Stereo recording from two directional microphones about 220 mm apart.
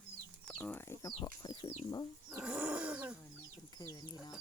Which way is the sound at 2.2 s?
5° right (ahead or behind).